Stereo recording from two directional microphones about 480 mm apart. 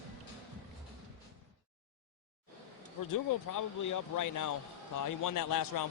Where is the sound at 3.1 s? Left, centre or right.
Left.